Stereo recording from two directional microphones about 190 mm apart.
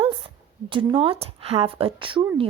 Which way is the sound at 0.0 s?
30° right (ahead or behind).